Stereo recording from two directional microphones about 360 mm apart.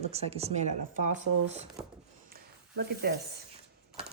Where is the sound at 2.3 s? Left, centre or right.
Right.